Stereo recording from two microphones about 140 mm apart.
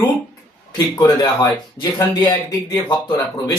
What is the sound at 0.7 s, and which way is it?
Speech, 30° left (ahead or behind).